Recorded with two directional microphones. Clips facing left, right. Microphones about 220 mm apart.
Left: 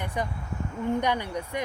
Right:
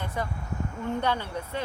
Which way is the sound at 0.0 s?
15° left (ahead or behind).